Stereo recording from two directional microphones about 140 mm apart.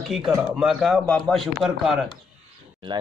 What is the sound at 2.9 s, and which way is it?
Speech, 35° right (ahead or behind).